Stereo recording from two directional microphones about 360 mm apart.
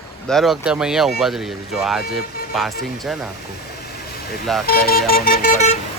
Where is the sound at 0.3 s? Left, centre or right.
Centre.